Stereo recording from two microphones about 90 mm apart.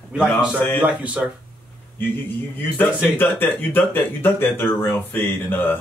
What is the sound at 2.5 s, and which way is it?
Speech, 20° left (ahead or behind).